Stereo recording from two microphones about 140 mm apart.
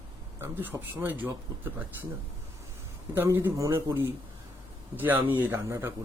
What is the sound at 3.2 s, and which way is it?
A man's voice, 15° right (ahead or behind).